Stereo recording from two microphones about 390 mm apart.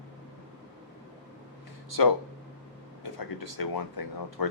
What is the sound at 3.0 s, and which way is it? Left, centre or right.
Speech, left.